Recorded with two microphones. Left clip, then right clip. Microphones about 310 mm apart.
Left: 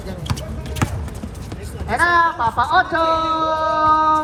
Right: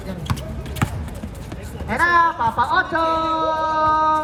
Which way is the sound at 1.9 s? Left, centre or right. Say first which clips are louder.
Left 1 dB; centre.